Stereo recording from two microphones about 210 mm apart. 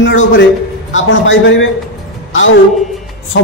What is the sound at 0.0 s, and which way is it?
Speech, 65° left (ahead or behind).